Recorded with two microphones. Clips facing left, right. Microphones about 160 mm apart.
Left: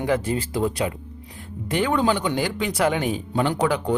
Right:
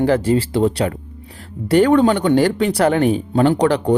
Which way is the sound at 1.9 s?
60° right (ahead or behind).